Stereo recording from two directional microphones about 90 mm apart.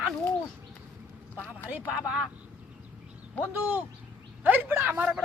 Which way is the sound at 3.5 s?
20° right (ahead or behind).